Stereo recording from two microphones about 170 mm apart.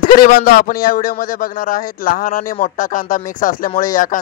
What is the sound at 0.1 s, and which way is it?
A man's voice, 60° left (ahead or behind).